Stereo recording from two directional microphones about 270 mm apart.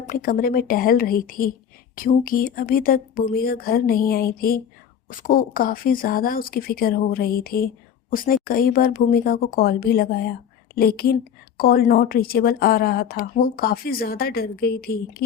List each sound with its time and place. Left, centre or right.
0.0 s a woman's voice: left